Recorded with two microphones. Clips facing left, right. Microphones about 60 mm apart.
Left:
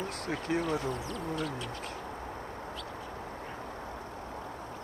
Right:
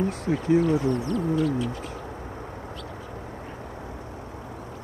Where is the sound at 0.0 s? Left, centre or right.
Centre.